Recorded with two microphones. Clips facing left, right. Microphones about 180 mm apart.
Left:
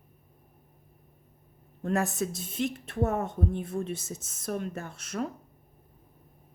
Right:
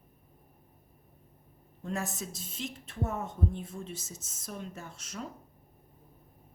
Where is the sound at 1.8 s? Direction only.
60° left (ahead or behind).